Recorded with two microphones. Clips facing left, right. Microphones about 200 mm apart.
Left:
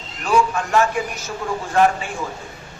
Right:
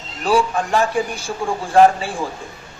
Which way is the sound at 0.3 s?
30° right (ahead or behind).